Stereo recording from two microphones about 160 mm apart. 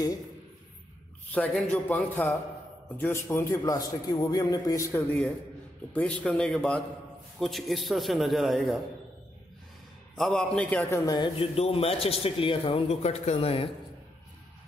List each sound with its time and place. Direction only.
1.3 s a man's voice: 5° left (ahead or behind)
5.9 s a man's voice: 5° left (ahead or behind)
10.1 s a man's voice: 5° left (ahead or behind)
11.1 s a man's voice: 30° left (ahead or behind)